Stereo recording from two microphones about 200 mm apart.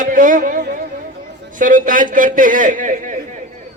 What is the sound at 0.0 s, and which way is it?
Music, 40° right (ahead or behind).